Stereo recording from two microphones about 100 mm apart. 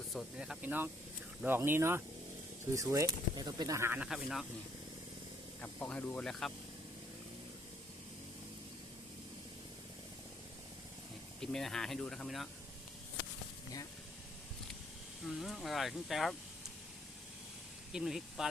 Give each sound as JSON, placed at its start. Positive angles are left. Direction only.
{"t": 0.3, "sound": "speech", "side_deg": -5}
{"t": 0.6, "sound": "speech", "side_deg": -15}
{"t": 3.8, "sound": "speech", "side_deg": -25}
{"t": 4.0, "sound": "speech", "side_deg": 0}
{"t": 5.5, "sound": "speech", "side_deg": 15}
{"t": 11.3, "sound": "speech", "side_deg": 5}
{"t": 15.3, "sound": "speech", "side_deg": 0}
{"t": 17.9, "sound": "speech", "side_deg": -5}